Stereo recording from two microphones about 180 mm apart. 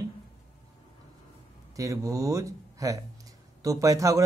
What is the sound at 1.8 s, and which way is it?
Speech, 15° right (ahead or behind).